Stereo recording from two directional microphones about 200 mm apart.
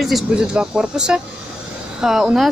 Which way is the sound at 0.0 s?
Centre (ahead or behind).